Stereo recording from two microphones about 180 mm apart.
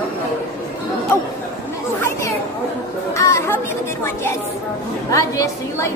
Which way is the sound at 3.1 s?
15° left (ahead or behind).